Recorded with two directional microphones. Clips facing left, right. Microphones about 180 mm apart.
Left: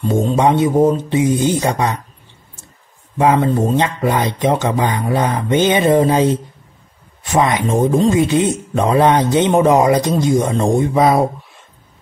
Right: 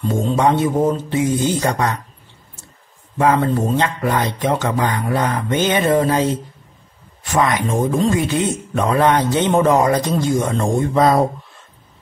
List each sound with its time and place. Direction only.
0.1 s speech: 20° left (ahead or behind)
3.2 s speech: 15° left (ahead or behind)